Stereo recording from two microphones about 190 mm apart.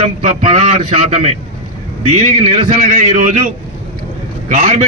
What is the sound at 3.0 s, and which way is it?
Speech, 40° right (ahead or behind).